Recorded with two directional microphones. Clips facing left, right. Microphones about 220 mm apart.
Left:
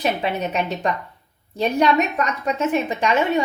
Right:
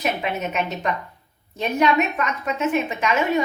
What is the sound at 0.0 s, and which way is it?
A woman's voice, 35° left (ahead or behind).